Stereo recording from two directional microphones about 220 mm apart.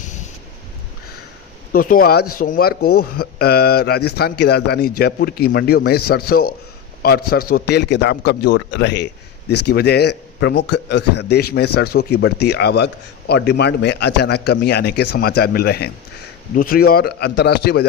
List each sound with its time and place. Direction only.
1.7 s a man's voice: 40° left (ahead or behind)